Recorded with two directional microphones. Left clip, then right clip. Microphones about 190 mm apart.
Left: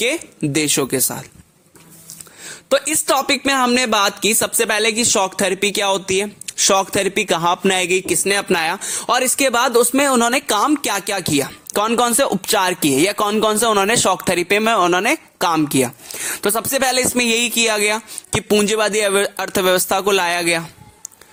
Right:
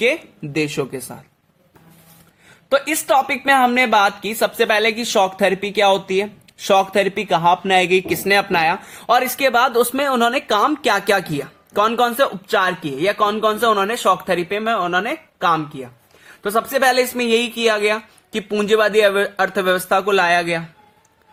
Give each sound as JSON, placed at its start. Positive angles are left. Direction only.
{"t": 0.0, "sound": "speech", "side_deg": 45}
{"t": 2.6, "sound": "speech", "side_deg": 40}
{"t": 9.0, "sound": "speech", "side_deg": 30}